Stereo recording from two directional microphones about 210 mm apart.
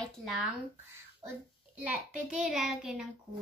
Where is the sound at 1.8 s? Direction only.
5° right (ahead or behind).